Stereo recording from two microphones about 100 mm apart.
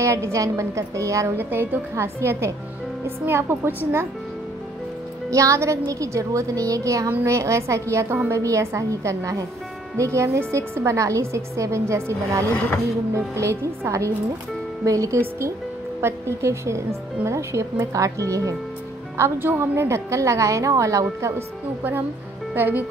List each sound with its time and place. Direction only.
0.0 s a woman's voice: 30° right (ahead or behind)
1.4 s a woman's voice: 20° right (ahead or behind)
5.3 s a woman's voice: 30° right (ahead or behind)
12.4 s speech: 20° left (ahead or behind)
13.1 s a woman's voice: 30° right (ahead or behind)